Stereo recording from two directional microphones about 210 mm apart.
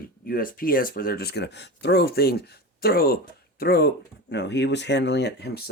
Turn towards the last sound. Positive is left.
turn(degrees=50)  # may be behind; listen again after turning